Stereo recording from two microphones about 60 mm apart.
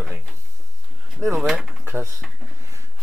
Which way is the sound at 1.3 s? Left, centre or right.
Centre.